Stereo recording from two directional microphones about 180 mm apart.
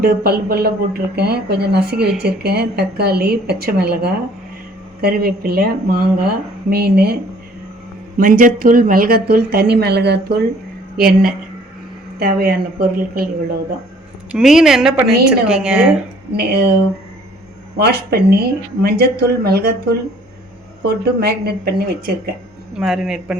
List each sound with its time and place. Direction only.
0.0 s speech: 60° right (ahead or behind)
8.2 s speech: 50° right (ahead or behind)
14.3 s a woman's voice: centre (ahead or behind)
16.3 s speech: 60° right (ahead or behind)
22.8 s a woman's voice: 5° right (ahead or behind)